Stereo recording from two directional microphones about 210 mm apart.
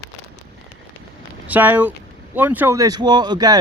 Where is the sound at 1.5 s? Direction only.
5° right (ahead or behind).